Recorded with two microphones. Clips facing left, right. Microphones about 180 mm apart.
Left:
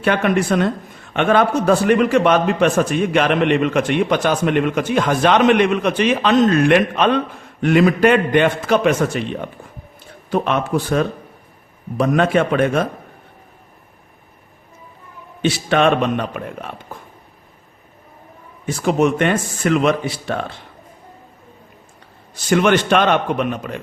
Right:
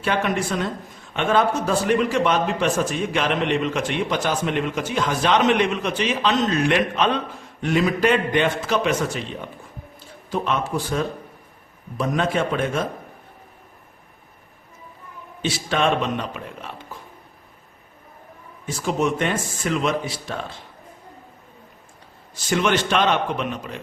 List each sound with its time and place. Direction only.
0.0 s a man's voice: 60° left (ahead or behind)
15.4 s a man's voice: 65° left (ahead or behind)
18.6 s a man's voice: 65° left (ahead or behind)
22.4 s a man's voice: 55° left (ahead or behind)